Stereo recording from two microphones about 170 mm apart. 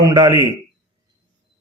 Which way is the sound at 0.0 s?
25° right (ahead or behind).